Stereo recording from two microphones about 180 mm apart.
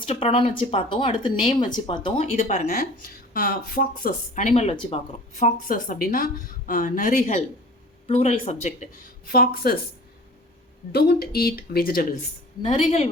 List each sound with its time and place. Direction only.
0.0 s speech: 30° left (ahead or behind)
2.6 s speech: 55° left (ahead or behind)
10.9 s speech: 60° left (ahead or behind)
12.7 s speech: 35° left (ahead or behind)